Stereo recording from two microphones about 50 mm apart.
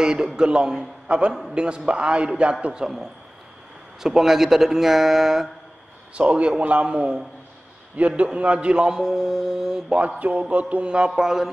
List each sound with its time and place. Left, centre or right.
0.0 s a man's voice: centre
4.0 s a man's voice: centre
6.1 s a man's voice: right
8.3 s a man's voice: right
9.9 s a man's voice: right
11.1 s a man's voice: centre